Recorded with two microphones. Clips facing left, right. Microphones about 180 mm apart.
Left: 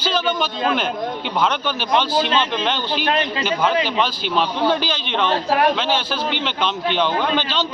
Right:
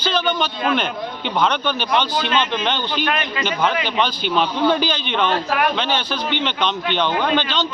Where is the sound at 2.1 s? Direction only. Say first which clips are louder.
Left 1 dB; 35° left (ahead or behind).